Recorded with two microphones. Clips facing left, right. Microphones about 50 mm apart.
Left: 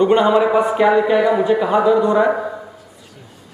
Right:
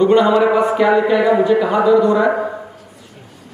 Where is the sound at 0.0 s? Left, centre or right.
Centre.